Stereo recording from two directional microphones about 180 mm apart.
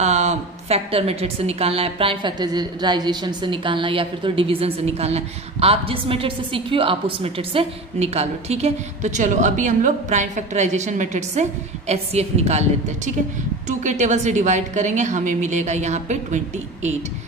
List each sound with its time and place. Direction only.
0.0 s a woman's voice: 40° right (ahead or behind)